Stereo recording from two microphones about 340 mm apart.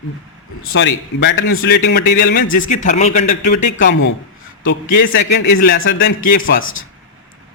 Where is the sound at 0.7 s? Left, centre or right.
Left.